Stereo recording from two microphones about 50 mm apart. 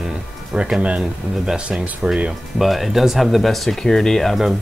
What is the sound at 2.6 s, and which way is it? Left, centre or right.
Speech, centre.